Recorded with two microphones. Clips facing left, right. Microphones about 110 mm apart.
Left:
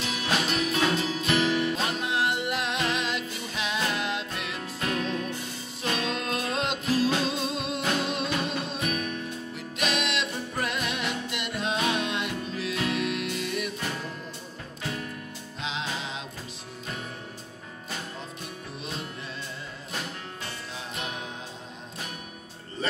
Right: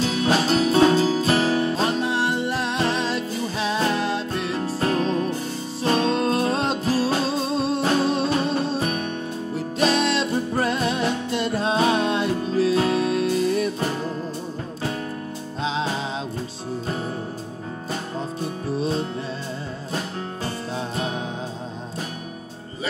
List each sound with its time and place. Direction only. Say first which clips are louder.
0.0 s music: right 8 dB; 35° right (ahead or behind)
15.6 s music: right 8 dB; 35° right (ahead or behind)
18.4 s music: right 13 dB; 35° right (ahead or behind)